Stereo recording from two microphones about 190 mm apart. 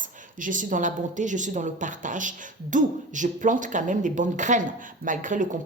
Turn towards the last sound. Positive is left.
turn(degrees=-40)  # may be behind; listen again after turning